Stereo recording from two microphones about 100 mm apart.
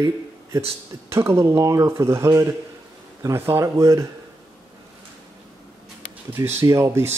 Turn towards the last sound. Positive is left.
turn(degrees=-25)  # may be behind; listen again after turning